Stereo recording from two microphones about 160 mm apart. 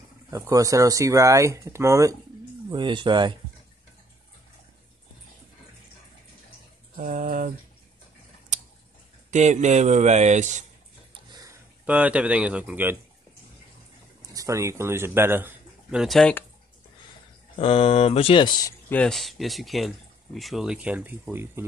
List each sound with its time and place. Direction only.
0.3 s speech: 20° right (ahead or behind)
2.7 s speech: 30° right (ahead or behind)
7.0 s speech: 60° right (ahead or behind)
8.5 s tick: 45° right (ahead or behind)
9.3 s speech: 45° right (ahead or behind)
11.2 s a sound: 25° right (ahead or behind)
11.8 s speech: 10° right (ahead or behind)
14.2 s a man's voice: 20° right (ahead or behind); by 16.4 s 5° left (ahead or behind)
17.6 s speech: 35° left (ahead or behind)
18.9 s speech: 5° left (ahead or behind); by 21.6 s 15° right (ahead or behind)